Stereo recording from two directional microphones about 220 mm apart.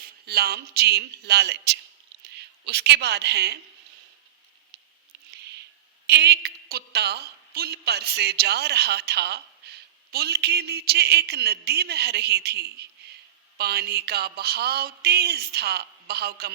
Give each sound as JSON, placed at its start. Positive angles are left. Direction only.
{"t": 0.0, "sound": "a woman's voice", "side_deg": -45}
{"t": 6.1, "sound": "a woman's voice", "side_deg": -50}